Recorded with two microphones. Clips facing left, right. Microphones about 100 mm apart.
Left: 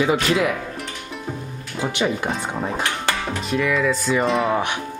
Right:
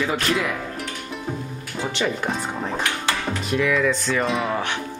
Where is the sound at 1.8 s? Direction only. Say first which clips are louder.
Left 2 dB; 10° left (ahead or behind).